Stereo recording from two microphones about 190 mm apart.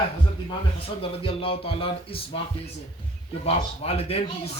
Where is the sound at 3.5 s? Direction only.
30° left (ahead or behind).